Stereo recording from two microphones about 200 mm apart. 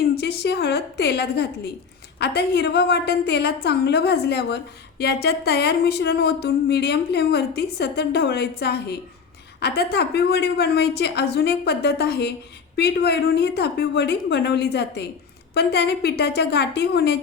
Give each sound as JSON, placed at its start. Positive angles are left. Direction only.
{"t": 0.2, "sound": "a woman's voice", "side_deg": 55}